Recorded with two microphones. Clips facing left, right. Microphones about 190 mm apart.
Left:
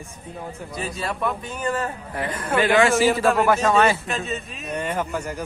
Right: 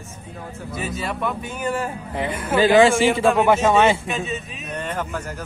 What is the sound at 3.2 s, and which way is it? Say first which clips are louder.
Speech: right 2 dB; centre (ahead or behind).